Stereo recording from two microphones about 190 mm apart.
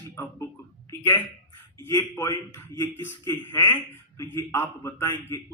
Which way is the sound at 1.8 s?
10° left (ahead or behind).